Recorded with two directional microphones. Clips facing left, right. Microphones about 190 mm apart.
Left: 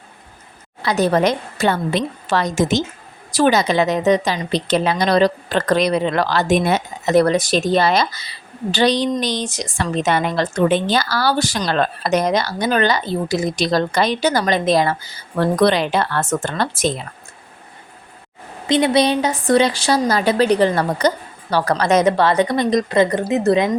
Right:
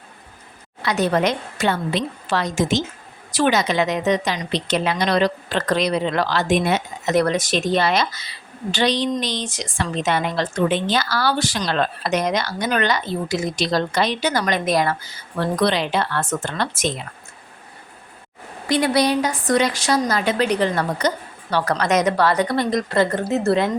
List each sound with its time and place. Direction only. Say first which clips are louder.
0.9 s a woman's voice: left 3 dB; 40° left (ahead or behind)
15.4 s speech: left 4 dB; 50° left (ahead or behind)
18.7 s a woman's voice: left 3 dB; 25° left (ahead or behind)